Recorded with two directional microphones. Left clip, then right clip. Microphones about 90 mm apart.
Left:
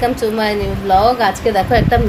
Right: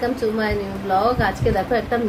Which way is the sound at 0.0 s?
40° left (ahead or behind).